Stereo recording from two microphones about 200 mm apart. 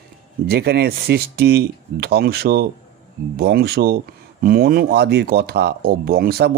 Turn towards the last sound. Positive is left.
turn(degrees=-50)  # may be behind; listen again after turning